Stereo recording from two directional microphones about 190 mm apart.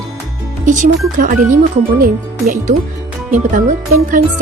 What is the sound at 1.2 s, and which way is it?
Music, 45° right (ahead or behind).